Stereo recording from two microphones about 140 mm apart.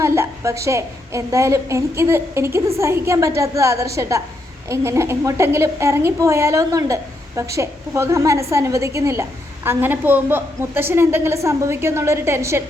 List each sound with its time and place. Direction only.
0.0 s a woman's voice: 20° right (ahead or behind)